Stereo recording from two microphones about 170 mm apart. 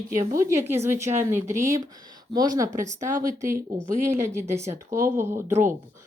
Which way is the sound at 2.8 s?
50° right (ahead or behind).